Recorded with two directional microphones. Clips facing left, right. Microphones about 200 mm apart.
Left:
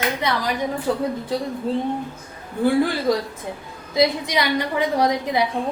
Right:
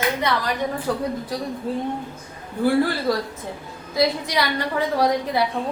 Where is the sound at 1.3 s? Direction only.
25° left (ahead or behind).